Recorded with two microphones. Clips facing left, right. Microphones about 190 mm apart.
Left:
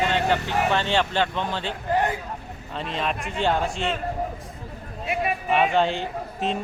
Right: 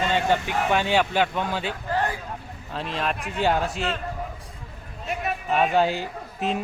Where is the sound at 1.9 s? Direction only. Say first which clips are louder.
Left 3 dB; 20° left (ahead or behind).